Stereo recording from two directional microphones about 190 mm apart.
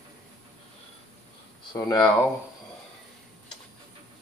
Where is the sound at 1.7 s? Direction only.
20° left (ahead or behind).